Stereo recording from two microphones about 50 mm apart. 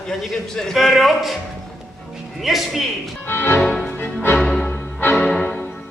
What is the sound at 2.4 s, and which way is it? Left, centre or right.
Speech, centre.